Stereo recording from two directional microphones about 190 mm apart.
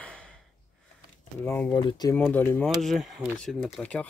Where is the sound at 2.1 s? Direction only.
10° left (ahead or behind).